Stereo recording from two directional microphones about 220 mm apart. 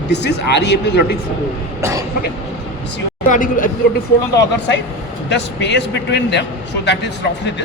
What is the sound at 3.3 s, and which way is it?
Speech, 35° left (ahead or behind).